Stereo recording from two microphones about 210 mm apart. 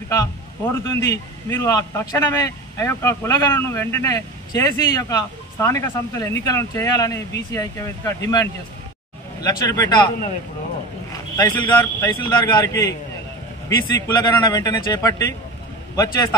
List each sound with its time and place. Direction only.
0.1 s a man's voice: 15° left (ahead or behind)
13.9 s a man's voice: 20° left (ahead or behind)